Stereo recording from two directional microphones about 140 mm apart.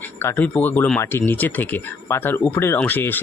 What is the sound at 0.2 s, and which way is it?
Speech, 15° left (ahead or behind).